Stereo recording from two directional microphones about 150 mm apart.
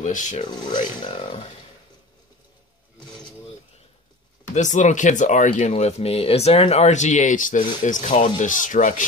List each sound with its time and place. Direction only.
0.0 s speech: 55° left (ahead or behind)
0.5 s speech: 30° left (ahead or behind)
4.6 s speech: 55° left (ahead or behind)